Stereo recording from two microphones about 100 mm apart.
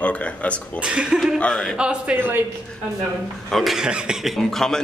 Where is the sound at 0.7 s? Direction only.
10° right (ahead or behind).